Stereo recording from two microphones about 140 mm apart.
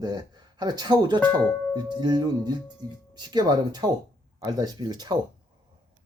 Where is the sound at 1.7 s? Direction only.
30° right (ahead or behind).